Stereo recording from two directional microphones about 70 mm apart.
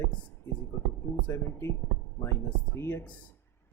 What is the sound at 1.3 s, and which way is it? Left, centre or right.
Speech, left.